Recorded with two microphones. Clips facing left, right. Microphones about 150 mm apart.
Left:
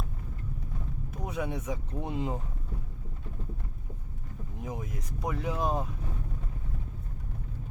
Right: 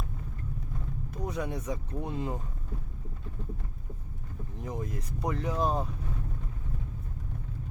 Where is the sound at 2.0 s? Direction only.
20° left (ahead or behind).